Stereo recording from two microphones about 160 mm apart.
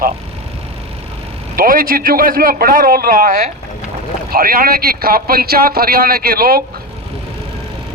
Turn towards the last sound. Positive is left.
turn(degrees=-70)  # may be behind; listen again after turning